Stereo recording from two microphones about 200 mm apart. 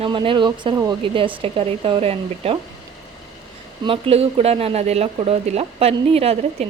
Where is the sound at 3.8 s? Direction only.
30° right (ahead or behind).